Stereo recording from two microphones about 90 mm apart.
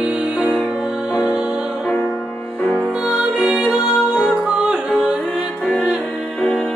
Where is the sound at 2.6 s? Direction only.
15° left (ahead or behind).